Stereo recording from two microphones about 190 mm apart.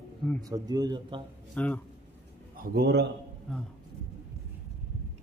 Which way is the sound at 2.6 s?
55° right (ahead or behind).